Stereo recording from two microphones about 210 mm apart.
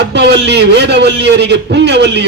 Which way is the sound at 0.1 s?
55° right (ahead or behind).